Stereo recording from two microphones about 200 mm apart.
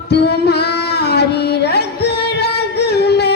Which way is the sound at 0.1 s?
55° left (ahead or behind).